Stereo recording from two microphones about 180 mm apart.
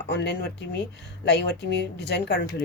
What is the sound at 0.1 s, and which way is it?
Speech, 70° left (ahead or behind).